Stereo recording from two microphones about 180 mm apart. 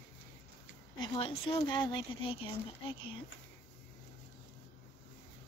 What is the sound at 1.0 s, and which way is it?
Speech, 30° left (ahead or behind).